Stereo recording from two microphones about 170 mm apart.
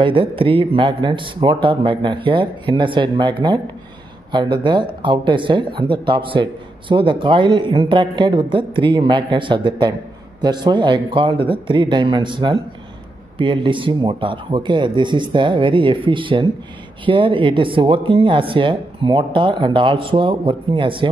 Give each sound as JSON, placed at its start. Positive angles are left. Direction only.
{"t": 0.0, "sound": "speech", "side_deg": -30}